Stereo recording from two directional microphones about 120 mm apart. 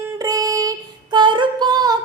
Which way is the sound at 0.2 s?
30° right (ahead or behind).